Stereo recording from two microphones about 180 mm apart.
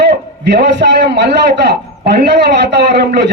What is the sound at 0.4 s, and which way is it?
A man's voice, 70° right (ahead or behind).